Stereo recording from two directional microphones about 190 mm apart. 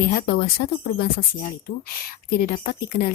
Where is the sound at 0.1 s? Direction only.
50° left (ahead or behind).